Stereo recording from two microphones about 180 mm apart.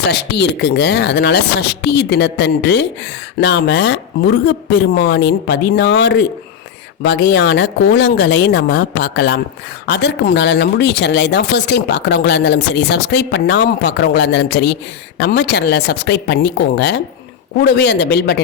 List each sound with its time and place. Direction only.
0.1 s speech: 70° left (ahead or behind)